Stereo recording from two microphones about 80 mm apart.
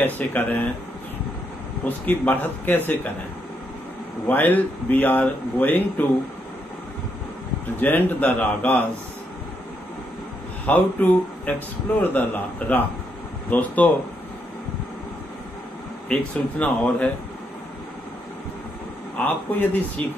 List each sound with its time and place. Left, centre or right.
0.0 s speech: left
1.9 s speech: left
4.3 s speech: left
7.8 s speech: left
10.6 s speech: left
16.1 s speech: centre
19.1 s speech: left
20.0 s speech: right